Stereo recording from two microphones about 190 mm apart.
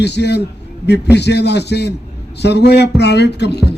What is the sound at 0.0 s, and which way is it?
Speech, 60° left (ahead or behind).